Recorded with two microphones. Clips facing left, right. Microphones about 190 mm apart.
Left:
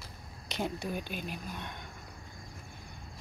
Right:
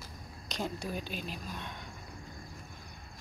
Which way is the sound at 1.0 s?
55° left (ahead or behind).